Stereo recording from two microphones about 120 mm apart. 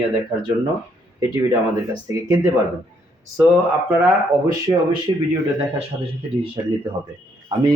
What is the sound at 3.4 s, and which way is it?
Speech, 15° right (ahead or behind).